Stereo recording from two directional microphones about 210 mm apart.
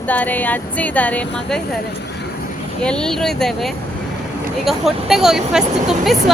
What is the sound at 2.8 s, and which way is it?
Speech, 5° left (ahead or behind).